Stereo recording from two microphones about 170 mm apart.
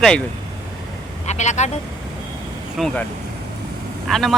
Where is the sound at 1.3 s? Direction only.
45° left (ahead or behind).